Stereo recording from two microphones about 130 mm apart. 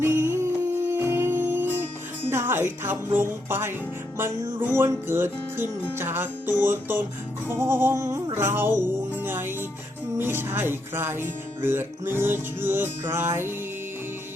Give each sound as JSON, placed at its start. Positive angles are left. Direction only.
{"t": 0.0, "sound": "music", "side_deg": -20}
{"t": 4.2, "sound": "speech", "side_deg": -20}
{"t": 7.4, "sound": "music", "side_deg": -20}
{"t": 10.2, "sound": "speech", "side_deg": -15}